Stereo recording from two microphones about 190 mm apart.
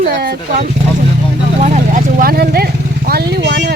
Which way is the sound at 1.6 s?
40° right (ahead or behind).